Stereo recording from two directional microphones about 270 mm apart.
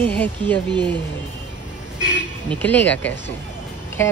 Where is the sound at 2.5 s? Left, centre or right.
Centre.